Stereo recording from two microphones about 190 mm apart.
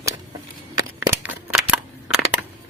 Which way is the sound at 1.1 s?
10° right (ahead or behind).